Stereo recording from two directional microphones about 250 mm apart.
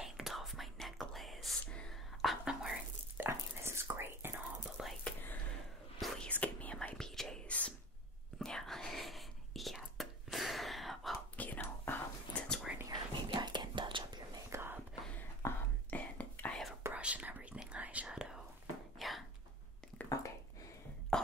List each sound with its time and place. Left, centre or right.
0.0 s whispering: centre
12.4 s whispering: centre
15.1 s whispering: centre
18.9 s a sound: centre
21.1 s whispering: centre